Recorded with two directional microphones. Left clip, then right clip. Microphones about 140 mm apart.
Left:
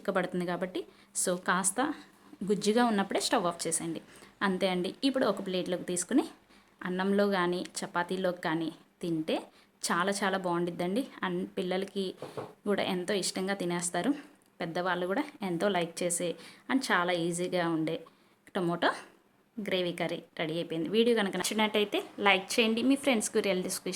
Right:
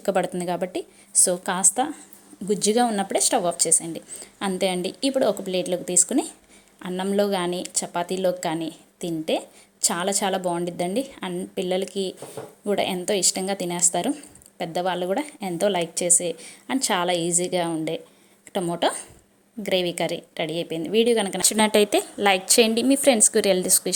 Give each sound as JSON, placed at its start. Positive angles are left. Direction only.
{"t": 0.0, "sound": "a woman's voice", "side_deg": -25}
{"t": 21.4, "sound": "speech", "side_deg": -45}